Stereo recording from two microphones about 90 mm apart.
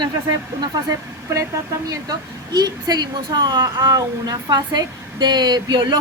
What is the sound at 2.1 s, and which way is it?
A woman's voice, 50° right (ahead or behind).